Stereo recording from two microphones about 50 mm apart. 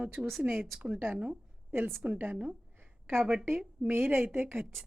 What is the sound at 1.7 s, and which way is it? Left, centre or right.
Speech, right.